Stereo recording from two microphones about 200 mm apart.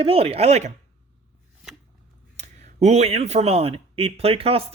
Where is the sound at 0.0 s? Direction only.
30° right (ahead or behind).